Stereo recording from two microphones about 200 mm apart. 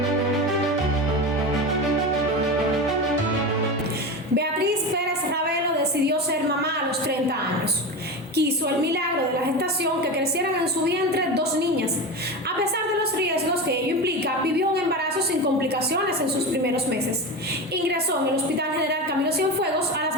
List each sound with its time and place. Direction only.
8.4 s music: 55° right (ahead or behind)
9.6 s a sound: 55° right (ahead or behind)
13.0 s music: 55° right (ahead or behind)
15.9 s a woman's voice: 55° right (ahead or behind)